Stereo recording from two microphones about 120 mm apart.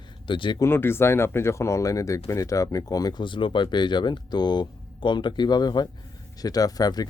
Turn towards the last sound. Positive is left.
turn(degrees=30)  # may be behind; listen again after turning